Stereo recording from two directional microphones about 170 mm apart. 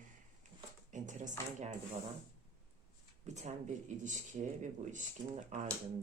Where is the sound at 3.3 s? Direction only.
45° right (ahead or behind).